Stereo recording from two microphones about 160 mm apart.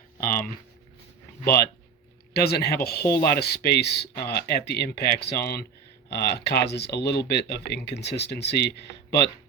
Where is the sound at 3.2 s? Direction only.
80° left.